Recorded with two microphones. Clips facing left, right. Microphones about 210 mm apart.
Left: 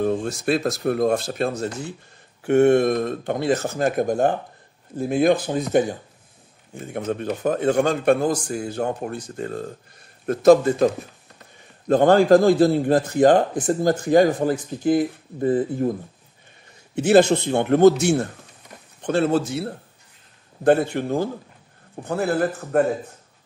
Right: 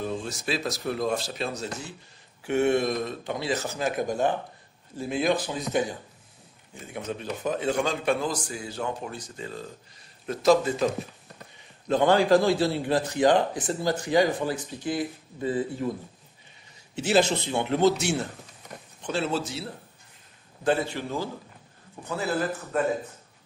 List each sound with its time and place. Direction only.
0.0 s a man's voice: 55° left (ahead or behind)
11.9 s a man's voice: 50° left (ahead or behind)